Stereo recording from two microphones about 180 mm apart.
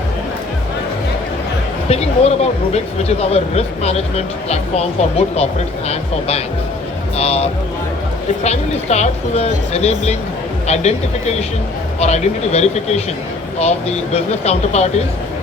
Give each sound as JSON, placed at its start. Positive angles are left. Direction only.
{"t": 1.9, "sound": "speech", "side_deg": 35}